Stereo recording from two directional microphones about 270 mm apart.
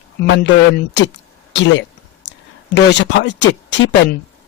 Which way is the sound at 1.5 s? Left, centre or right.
Left.